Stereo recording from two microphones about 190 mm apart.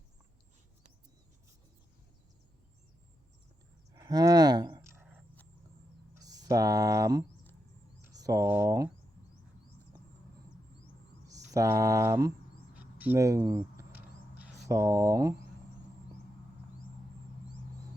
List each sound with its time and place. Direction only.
3.9 s a sound: 20° right (ahead or behind)
8.0 s speech: 20° right (ahead or behind)
11.3 s speech: 15° right (ahead or behind)